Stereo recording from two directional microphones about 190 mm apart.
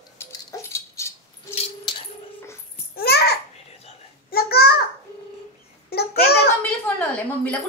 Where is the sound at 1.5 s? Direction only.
30° left (ahead or behind).